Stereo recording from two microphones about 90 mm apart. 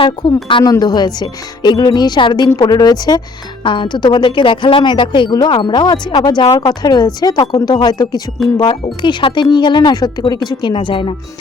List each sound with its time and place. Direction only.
0.6 s speech: 50° left (ahead or behind)
3.6 s speech: 60° left (ahead or behind)
8.7 s speech: 65° left (ahead or behind)